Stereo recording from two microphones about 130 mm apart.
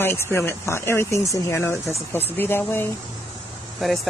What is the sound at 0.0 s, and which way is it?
Speech, 20° left (ahead or behind).